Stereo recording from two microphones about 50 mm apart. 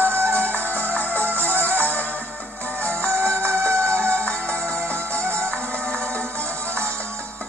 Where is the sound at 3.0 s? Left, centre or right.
Right.